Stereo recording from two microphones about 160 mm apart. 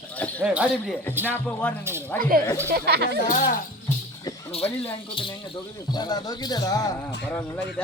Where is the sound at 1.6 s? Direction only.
10° left (ahead or behind).